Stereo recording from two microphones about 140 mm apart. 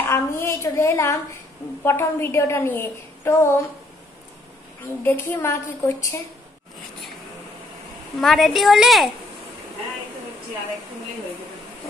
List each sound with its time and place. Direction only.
0.0 s a woman's voice: 20° left (ahead or behind)
5.0 s a woman's voice: 15° left (ahead or behind)
8.2 s a woman's voice: 5° left (ahead or behind)